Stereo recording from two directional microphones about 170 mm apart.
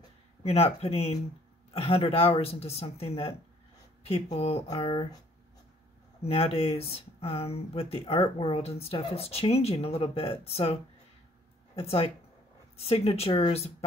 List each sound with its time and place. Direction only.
0.4 s speech: 35° left (ahead or behind)
6.2 s speech: 35° left (ahead or behind)